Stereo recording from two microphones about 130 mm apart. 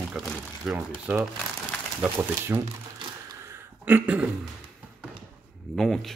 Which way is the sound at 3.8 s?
10° right (ahead or behind).